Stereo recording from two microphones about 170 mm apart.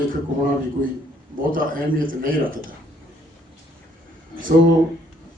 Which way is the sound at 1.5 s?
55° right (ahead or behind).